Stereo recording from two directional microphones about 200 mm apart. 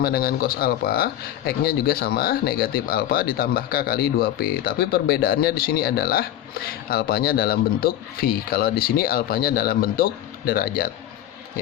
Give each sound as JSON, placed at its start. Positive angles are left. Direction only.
{"t": 0.0, "sound": "speech", "side_deg": 50}